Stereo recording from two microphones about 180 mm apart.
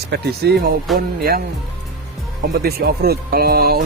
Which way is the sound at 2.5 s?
60° right (ahead or behind).